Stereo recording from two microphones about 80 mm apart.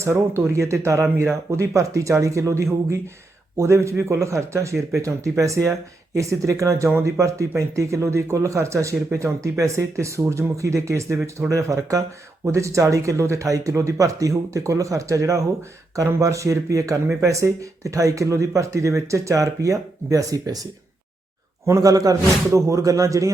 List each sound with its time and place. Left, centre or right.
0.0 s a man's voice: right
21.8 s a man's voice: right